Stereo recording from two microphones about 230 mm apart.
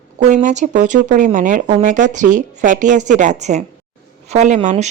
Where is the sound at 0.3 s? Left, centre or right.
Right.